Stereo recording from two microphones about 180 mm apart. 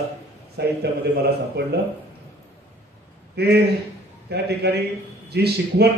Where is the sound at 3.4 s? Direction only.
65° right (ahead or behind).